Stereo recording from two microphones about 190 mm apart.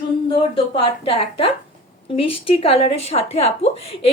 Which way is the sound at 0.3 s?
30° left (ahead or behind).